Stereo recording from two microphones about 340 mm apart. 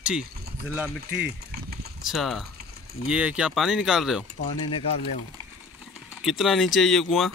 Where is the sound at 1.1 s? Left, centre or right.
Right.